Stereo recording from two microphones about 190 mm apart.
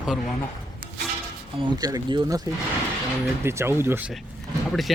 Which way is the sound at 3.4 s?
15° right (ahead or behind).